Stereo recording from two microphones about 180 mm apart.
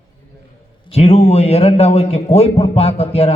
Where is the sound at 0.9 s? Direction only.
35° left (ahead or behind).